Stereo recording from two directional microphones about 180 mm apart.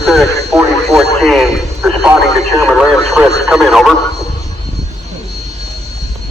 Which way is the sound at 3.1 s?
Centre (ahead or behind).